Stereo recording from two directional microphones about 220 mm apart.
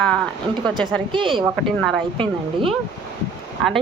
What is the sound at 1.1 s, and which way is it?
Speech, 20° right (ahead or behind).